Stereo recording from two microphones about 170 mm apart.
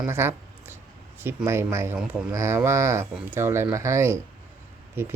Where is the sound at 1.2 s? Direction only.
15° right (ahead or behind).